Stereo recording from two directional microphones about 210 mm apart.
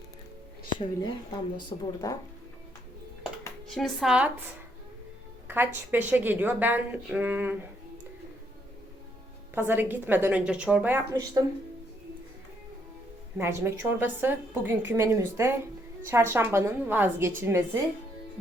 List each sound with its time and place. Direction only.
0.8 s speech: 20° left (ahead or behind)
3.8 s speech: centre (ahead or behind)
5.5 s a woman's voice: 10° right (ahead or behind)
9.6 s a woman's voice: 10° right (ahead or behind)
13.3 s a woman's voice: 10° right (ahead or behind)